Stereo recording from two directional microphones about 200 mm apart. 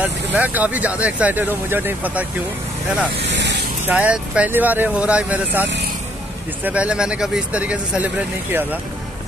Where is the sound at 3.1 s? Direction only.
60° right (ahead or behind).